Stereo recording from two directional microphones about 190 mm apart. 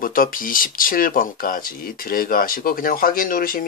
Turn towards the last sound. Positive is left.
turn(degrees=50)  # may be behind; listen again after turning